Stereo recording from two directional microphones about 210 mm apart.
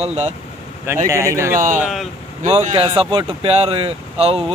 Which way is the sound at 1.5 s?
40° right (ahead or behind).